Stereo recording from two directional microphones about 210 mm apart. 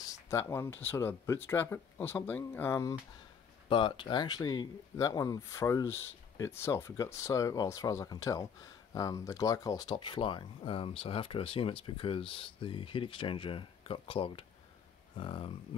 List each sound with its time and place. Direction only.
0.0 s speech: 15° left (ahead or behind)
3.6 s speech: 25° left (ahead or behind)